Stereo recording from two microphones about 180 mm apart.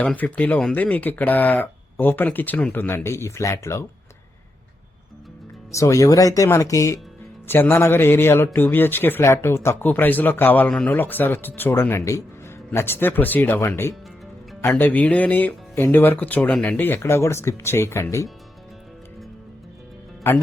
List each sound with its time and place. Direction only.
0.0 s speech: 10° left (ahead or behind)
5.7 s speech: 15° left (ahead or behind)
20.2 s speech: 10° left (ahead or behind)